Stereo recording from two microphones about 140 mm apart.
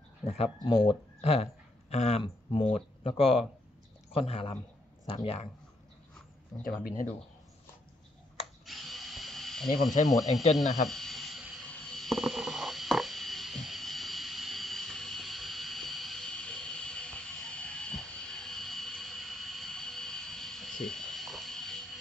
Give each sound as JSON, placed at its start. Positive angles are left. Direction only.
{"t": 0.3, "sound": "speech", "side_deg": 45}
{"t": 2.2, "sound": "speech", "side_deg": 40}
{"t": 6.6, "sound": "speech", "side_deg": 90}
{"t": 8.6, "sound": "drill", "side_deg": 0}
{"t": 10.5, "sound": "snake", "side_deg": 0}